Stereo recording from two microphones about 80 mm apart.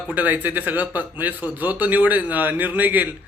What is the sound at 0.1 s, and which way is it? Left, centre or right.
Speech, right.